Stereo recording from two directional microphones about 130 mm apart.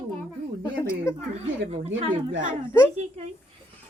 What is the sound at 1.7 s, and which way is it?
Speech, 55° right (ahead or behind).